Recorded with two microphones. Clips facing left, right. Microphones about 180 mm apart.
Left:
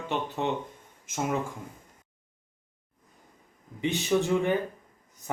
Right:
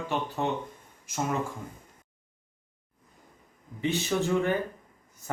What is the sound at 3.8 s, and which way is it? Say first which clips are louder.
Speech: left 2 dB; 15° left (ahead or behind).